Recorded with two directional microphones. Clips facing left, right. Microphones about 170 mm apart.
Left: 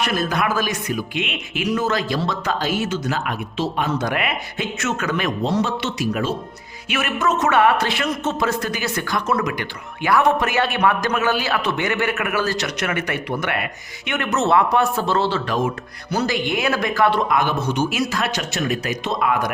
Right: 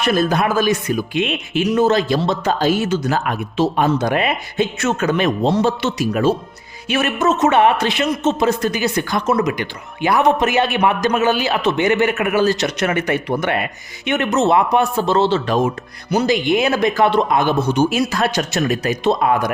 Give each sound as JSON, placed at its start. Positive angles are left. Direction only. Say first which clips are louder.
{"t": 0.0, "sound": "speech", "louder": "right 5 dB", "side_deg": -30}
{"t": 3.9, "sound": "speech", "louder": "right 5 dB", "side_deg": -25}
{"t": 5.8, "sound": "speech", "louder": "right 6 dB", "side_deg": -40}